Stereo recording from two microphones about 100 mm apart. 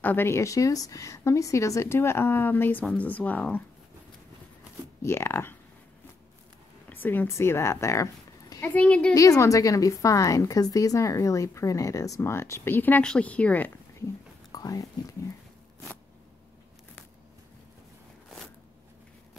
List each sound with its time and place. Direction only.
0.0 s a woman's voice: 20° left (ahead or behind)
5.0 s a woman's voice: 25° left (ahead or behind)
6.9 s speech: 20° left (ahead or behind)
8.6 s a woman's voice: 15° left (ahead or behind)
9.1 s a woman's voice: 35° left (ahead or behind); by 13.7 s 15° left (ahead or behind)
14.5 s speech: 35° left (ahead or behind)